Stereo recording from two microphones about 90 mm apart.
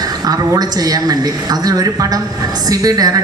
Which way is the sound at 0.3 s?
45° right (ahead or behind).